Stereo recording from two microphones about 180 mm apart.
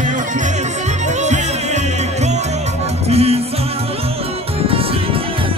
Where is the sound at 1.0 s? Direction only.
40° right (ahead or behind).